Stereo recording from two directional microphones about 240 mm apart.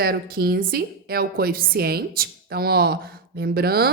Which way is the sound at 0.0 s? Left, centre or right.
Right.